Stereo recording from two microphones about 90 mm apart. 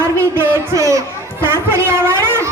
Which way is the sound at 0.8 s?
35° right (ahead or behind).